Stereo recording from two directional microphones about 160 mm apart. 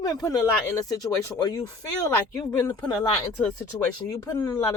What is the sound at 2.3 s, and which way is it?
Speech, 20° left (ahead or behind).